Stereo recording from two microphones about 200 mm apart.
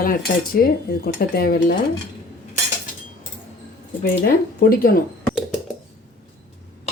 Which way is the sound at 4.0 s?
45° left (ahead or behind).